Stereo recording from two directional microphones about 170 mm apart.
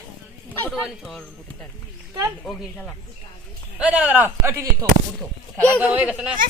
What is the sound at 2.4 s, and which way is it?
Speech, 5° left (ahead or behind).